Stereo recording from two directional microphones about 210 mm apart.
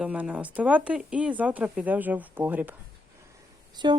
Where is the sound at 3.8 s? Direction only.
20° right (ahead or behind).